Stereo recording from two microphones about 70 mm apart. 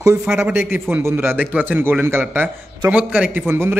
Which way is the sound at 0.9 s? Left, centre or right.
Right.